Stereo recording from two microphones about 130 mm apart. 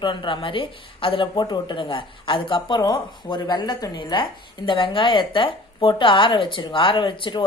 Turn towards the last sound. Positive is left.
turn(degrees=40)  # may be behind; listen again after turning